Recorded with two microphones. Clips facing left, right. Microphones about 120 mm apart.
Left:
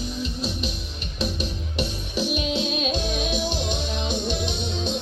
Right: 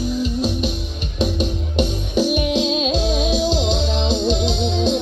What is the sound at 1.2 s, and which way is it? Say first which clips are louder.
Music: right 8 dB; 20° right (ahead or behind).